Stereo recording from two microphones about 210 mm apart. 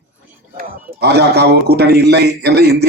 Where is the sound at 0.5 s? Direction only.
50° right (ahead or behind).